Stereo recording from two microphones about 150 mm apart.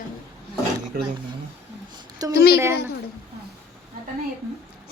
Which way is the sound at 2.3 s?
90° left.